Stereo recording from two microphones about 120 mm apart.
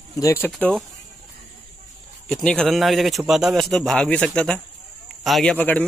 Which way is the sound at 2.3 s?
5° left (ahead or behind).